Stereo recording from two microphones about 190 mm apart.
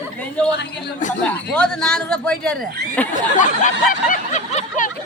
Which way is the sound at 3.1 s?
40° left (ahead or behind).